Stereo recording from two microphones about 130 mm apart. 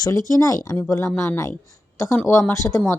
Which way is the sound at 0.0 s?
25° left (ahead or behind).